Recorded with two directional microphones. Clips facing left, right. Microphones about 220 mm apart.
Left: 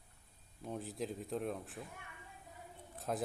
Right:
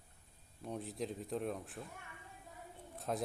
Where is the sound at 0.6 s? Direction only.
Centre (ahead or behind).